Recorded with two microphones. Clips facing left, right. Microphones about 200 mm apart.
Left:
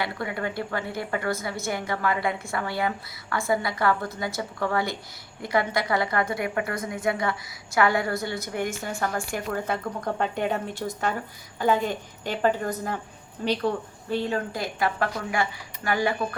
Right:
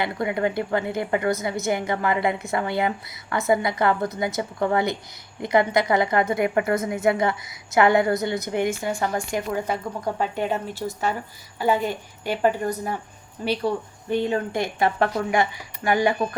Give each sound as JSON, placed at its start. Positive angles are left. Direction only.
{"t": 0.0, "sound": "a woman's voice", "side_deg": -20}
{"t": 10.0, "sound": "a woman's voice", "side_deg": -5}